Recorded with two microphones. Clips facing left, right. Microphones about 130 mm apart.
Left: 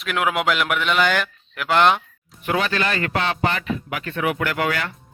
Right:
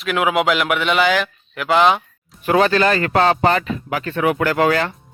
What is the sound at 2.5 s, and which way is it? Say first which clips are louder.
Speech: right 7 dB; 35° right (ahead or behind).